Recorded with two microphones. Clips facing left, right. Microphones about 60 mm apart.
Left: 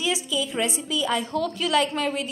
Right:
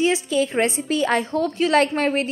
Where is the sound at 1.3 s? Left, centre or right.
Right.